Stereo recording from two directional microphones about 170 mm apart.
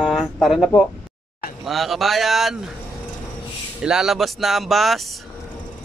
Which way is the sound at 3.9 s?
5° right (ahead or behind).